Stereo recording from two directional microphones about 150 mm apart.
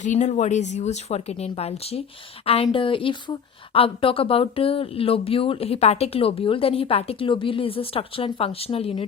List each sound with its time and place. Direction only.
0.0 s speech: 50° left (ahead or behind)